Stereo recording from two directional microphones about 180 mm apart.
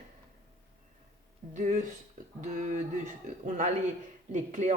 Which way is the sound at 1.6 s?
45° right (ahead or behind).